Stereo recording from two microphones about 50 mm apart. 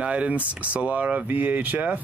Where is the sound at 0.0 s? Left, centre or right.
Right.